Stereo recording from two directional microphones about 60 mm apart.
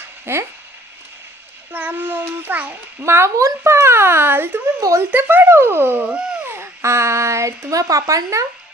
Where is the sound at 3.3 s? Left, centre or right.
Right.